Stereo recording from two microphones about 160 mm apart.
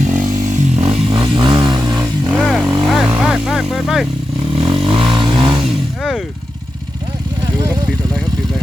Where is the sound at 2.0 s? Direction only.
5° right (ahead or behind).